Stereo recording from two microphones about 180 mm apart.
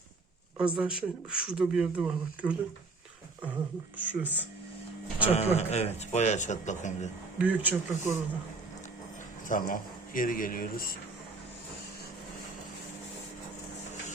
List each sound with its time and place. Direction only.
0.6 s speech: 5° right (ahead or behind)
3.9 s speech: 10° right (ahead or behind)
5.3 s a man's voice: 35° left (ahead or behind)
7.3 s speech: 10° right (ahead or behind)
9.5 s speech: 50° left (ahead or behind)